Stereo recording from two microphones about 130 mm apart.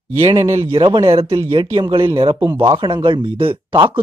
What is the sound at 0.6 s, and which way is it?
Speech, 45° right (ahead or behind).